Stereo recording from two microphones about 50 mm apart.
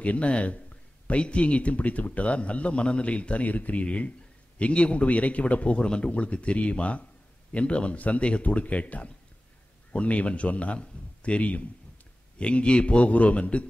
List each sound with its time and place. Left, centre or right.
0.0 s speech: left